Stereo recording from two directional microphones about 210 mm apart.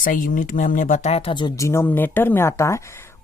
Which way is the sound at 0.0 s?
40° left (ahead or behind).